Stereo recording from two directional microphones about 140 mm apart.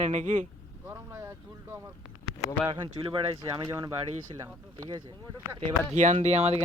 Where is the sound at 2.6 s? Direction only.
35° right (ahead or behind).